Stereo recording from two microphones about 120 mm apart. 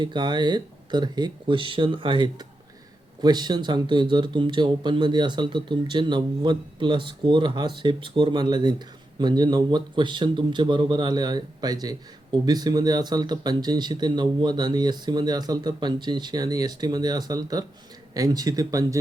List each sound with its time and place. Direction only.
0.0 s speech: 40° right (ahead or behind)